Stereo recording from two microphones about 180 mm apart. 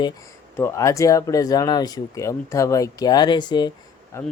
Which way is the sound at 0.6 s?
15° left (ahead or behind).